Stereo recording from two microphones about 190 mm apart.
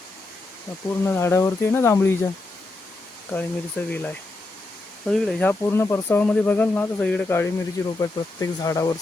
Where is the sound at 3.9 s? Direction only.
10° left (ahead or behind).